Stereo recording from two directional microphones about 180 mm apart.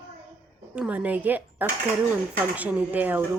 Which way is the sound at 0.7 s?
5° right (ahead or behind).